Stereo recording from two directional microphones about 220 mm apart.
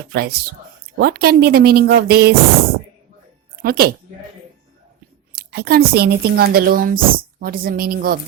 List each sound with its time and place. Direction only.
0.1 s a woman's voice: 45° right (ahead or behind)
3.6 s a woman's voice: 45° right (ahead or behind)
5.3 s a woman's voice: 45° right (ahead or behind)